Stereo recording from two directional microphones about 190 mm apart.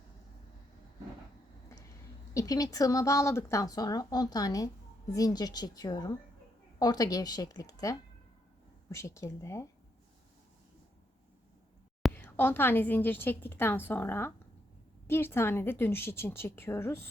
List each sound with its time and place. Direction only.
2.3 s a woman's voice: 20° left (ahead or behind)
12.1 s a woman's voice: 10° left (ahead or behind)